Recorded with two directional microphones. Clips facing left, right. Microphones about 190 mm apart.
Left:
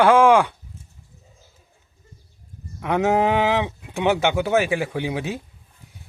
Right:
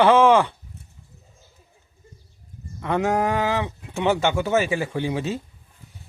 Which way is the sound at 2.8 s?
15° left (ahead or behind).